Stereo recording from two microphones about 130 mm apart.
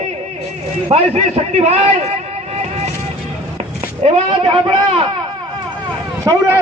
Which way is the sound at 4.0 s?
55° right (ahead or behind).